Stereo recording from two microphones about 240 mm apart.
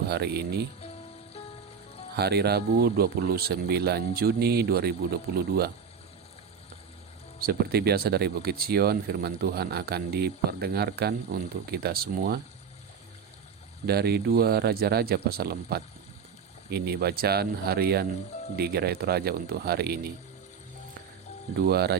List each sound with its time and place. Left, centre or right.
0.1 s speech: right
2.1 s speech: right
7.4 s speech: right
13.8 s speech: right
21.7 s speech: right